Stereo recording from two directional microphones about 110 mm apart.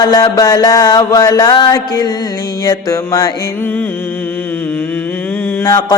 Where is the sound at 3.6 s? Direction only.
20° left (ahead or behind).